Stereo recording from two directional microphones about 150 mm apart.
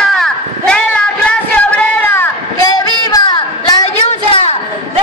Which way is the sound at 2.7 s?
25° left (ahead or behind).